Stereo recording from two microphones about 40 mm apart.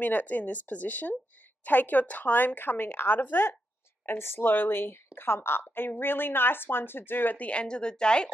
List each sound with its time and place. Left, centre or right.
0.0 s a woman's voice: left
3.2 s a woman's voice: left
4.0 s a woman's voice: left
7.3 s speech: left
7.6 s speech: left